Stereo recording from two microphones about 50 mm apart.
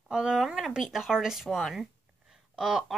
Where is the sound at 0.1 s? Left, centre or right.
Centre.